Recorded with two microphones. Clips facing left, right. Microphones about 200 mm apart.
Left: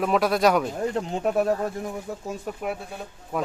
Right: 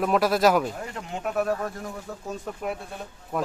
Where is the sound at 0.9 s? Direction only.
35° left (ahead or behind).